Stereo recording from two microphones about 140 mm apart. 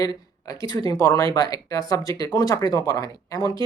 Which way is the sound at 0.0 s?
30° left (ahead or behind).